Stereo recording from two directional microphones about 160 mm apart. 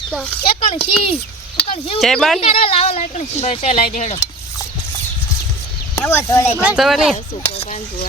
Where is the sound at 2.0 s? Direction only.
Centre (ahead or behind).